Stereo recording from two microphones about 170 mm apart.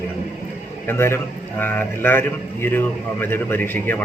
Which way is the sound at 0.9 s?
15° left (ahead or behind).